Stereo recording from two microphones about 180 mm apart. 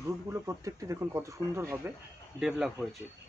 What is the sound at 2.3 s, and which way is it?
Speech, 5° right (ahead or behind).